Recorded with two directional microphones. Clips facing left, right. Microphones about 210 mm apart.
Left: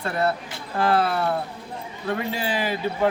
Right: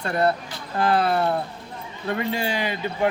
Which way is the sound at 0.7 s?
Centre (ahead or behind).